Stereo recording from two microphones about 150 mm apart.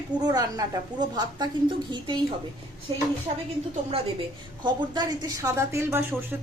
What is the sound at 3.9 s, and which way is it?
A woman's voice, 35° right (ahead or behind).